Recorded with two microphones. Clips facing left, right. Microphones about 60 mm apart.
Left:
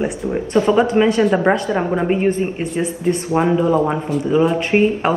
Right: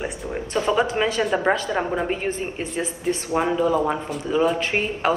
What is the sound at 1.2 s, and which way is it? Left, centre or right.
Speech, centre.